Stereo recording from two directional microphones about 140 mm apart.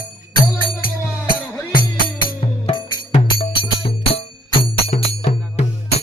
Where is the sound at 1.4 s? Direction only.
15° left (ahead or behind).